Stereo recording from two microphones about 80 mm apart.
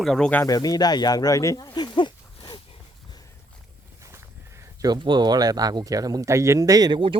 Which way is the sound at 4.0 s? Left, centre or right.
Right.